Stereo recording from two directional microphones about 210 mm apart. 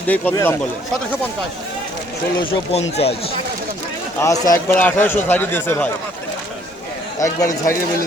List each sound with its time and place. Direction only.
0.1 s a man's voice: 10° left (ahead or behind)
2.4 s speech: 30° left (ahead or behind)
4.2 s a man's voice: 15° left (ahead or behind)
7.2 s a man's voice: 15° left (ahead or behind)